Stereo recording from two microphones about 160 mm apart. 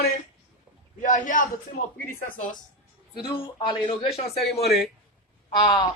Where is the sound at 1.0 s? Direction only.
55° left (ahead or behind).